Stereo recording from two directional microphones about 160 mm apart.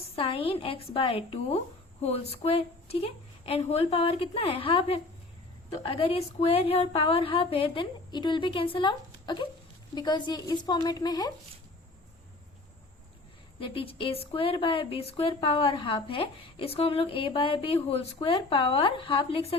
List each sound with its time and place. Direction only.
0.2 s a woman's voice: 35° left (ahead or behind)
13.6 s speech: 35° left (ahead or behind)